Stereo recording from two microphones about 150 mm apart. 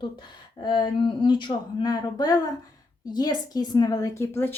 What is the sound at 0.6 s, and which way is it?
Speech, 30° left (ahead or behind).